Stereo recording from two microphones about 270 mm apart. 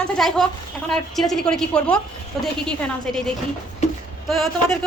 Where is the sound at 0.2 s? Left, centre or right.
Centre.